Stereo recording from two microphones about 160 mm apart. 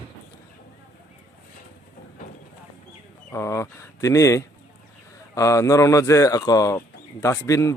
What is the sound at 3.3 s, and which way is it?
Speech, 15° left (ahead or behind).